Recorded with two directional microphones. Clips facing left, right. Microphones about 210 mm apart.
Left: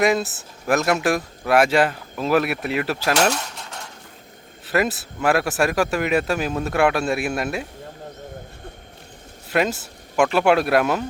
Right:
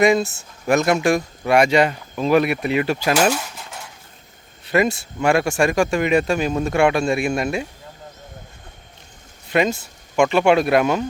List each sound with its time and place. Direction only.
0.0 s speech: centre (ahead or behind)
9.5 s speech: 5° left (ahead or behind)